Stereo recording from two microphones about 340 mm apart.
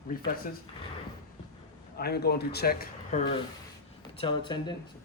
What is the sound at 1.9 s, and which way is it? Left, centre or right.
A man's voice, left.